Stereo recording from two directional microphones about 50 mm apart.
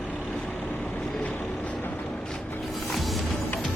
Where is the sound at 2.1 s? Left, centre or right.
Centre.